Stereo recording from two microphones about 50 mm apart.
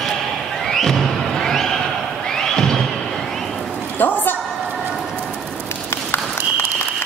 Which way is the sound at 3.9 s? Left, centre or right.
Left.